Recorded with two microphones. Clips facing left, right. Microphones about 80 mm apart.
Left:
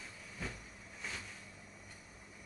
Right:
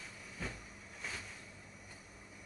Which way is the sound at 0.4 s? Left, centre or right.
Centre.